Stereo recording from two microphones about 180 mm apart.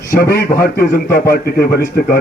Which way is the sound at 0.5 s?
60° left (ahead or behind).